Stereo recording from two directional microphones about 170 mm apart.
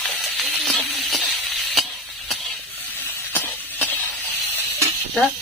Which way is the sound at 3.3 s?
10° left (ahead or behind).